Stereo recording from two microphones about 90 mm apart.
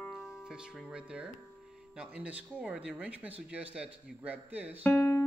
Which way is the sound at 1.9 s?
15° right (ahead or behind).